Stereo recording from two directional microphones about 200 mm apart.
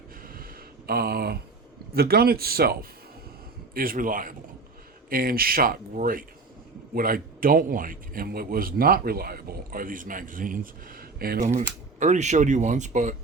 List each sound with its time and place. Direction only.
0.2 s a sound: 45° right (ahead or behind)
1.9 s a man's voice: 50° right (ahead or behind)
3.8 s a man's voice: 45° right (ahead or behind)